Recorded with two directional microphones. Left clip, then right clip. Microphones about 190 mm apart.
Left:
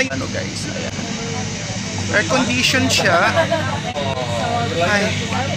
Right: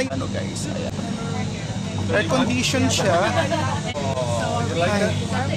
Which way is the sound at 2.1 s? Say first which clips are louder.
Left 4 dB; 5° right (ahead or behind).